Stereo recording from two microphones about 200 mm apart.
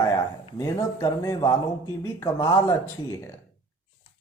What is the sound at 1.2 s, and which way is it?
Speech, 15° left (ahead or behind).